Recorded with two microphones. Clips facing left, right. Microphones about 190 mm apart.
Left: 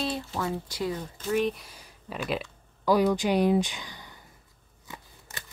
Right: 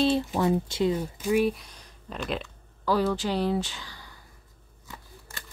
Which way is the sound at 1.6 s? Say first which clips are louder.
Left 1 dB; 5° left (ahead or behind).